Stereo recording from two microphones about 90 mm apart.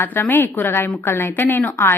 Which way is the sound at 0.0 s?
25° left (ahead or behind).